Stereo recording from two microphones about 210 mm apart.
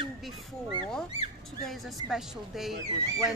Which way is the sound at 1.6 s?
Centre (ahead or behind).